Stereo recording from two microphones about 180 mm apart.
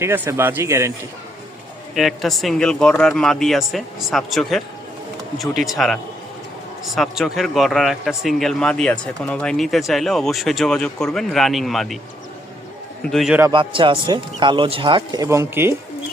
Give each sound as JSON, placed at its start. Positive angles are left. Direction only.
{"t": 0.0, "sound": "speech", "side_deg": -15}
{"t": 2.0, "sound": "speech", "side_deg": 0}
{"t": 5.7, "sound": "speech", "side_deg": 0}
{"t": 13.0, "sound": "speech", "side_deg": 0}
{"t": 13.5, "sound": "speech", "side_deg": -25}